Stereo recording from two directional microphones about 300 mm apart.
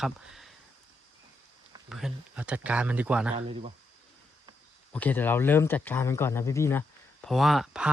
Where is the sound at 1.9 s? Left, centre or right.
Centre.